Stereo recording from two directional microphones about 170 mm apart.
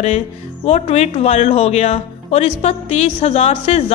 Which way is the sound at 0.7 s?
40° left (ahead or behind).